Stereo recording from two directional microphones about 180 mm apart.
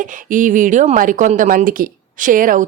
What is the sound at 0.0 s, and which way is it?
Speech, 45° right (ahead or behind).